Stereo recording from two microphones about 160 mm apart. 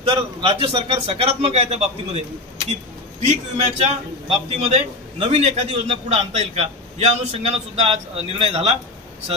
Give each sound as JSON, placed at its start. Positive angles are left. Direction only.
{"t": 0.0, "sound": "a man's voice", "side_deg": -30}
{"t": 3.3, "sound": "a man's voice", "side_deg": -45}